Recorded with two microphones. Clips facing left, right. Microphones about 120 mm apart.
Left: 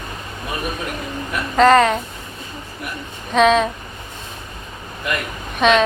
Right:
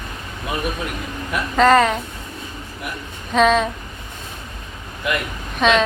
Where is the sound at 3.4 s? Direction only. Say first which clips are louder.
Left 1 dB; centre (ahead or behind).